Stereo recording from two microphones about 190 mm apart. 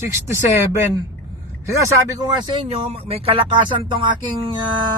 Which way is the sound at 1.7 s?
15° right (ahead or behind).